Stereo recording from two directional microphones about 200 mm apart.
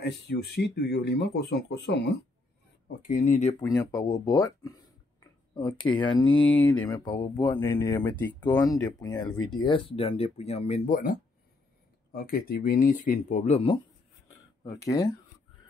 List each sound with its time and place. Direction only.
0.0 s speech: 55° left (ahead or behind)
3.0 s speech: 40° left (ahead or behind)
3.6 s speech: 20° left (ahead or behind)
14.6 s speech: 20° left (ahead or behind)